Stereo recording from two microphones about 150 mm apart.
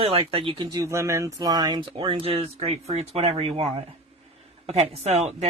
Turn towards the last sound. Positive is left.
turn(degrees=-45)  # may be behind; listen again after turning